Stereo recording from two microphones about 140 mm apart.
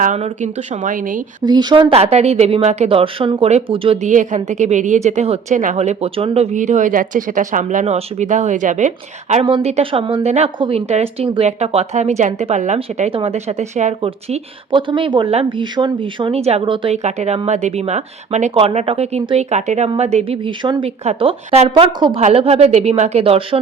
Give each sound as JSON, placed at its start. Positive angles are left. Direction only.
{"t": 0.0, "sound": "speech", "side_deg": -60}
{"t": 1.4, "sound": "a woman's voice", "side_deg": -30}
{"t": 4.0, "sound": "a woman's voice", "side_deg": -60}
{"t": 6.6, "sound": "speech", "side_deg": -65}
{"t": 7.9, "sound": "a woman's voice", "side_deg": -55}
{"t": 9.6, "sound": "a woman's voice", "side_deg": -45}
{"t": 16.9, "sound": "a woman's voice", "side_deg": -55}
{"t": 21.0, "sound": "a woman's voice", "side_deg": -45}